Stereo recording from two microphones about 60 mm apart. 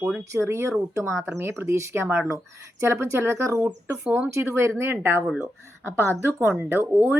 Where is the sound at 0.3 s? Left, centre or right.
Right.